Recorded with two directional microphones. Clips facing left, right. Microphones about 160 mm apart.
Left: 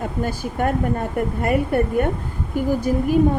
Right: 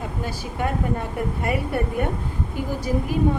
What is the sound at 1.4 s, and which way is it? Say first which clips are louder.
Speech: left 6 dB; 50° left (ahead or behind).